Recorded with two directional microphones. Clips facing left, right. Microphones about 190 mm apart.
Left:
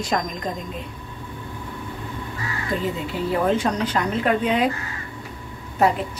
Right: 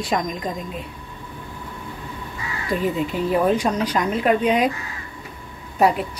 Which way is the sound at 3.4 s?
10° right (ahead or behind).